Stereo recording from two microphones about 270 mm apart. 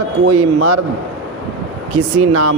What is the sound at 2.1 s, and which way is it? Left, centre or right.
Speech, right.